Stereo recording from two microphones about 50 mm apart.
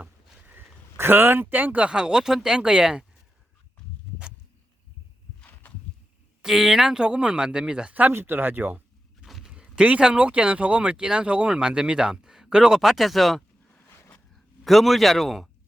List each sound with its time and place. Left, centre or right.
0.0 s rowboat: right
0.9 s speech: right
1.9 s speech: centre
6.4 s speech: centre
8.1 s speech: right
9.2 s a sound: centre
9.5 s a sound: centre
10.0 s speech: right; by 13.4 s centre
13.8 s a sound: left
14.3 s a man's voice: centre